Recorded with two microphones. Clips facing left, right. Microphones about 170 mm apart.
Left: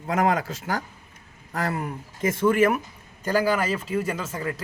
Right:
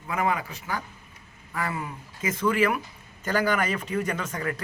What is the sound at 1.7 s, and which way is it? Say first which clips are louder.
Speech: left 4 dB; 50° left (ahead or behind).